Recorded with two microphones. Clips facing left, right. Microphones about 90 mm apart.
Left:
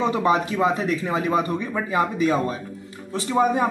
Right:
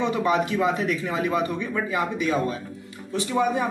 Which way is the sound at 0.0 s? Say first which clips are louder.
Left 2 dB; 35° left (ahead or behind).